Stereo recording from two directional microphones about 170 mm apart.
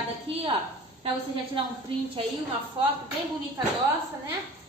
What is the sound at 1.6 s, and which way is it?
Speech, 30° right (ahead or behind).